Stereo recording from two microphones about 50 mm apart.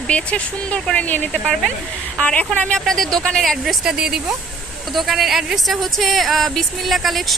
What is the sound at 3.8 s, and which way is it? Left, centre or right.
Speech, centre.